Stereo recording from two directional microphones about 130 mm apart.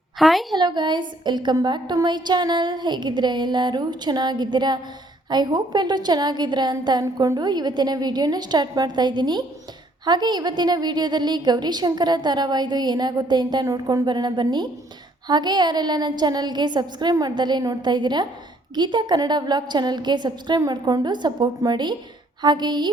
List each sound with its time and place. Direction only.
0.2 s a woman's voice: centre (ahead or behind)
0.6 s a woman's voice: 35° right (ahead or behind)